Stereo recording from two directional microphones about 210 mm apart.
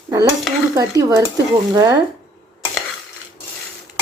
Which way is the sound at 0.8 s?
15° right (ahead or behind).